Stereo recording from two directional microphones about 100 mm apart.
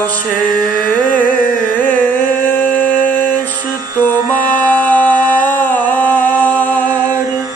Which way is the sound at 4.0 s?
40° right (ahead or behind).